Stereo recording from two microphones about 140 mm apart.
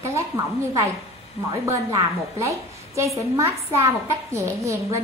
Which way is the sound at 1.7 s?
20° right (ahead or behind).